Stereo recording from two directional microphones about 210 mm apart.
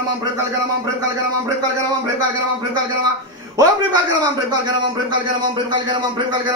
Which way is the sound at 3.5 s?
15° right (ahead or behind).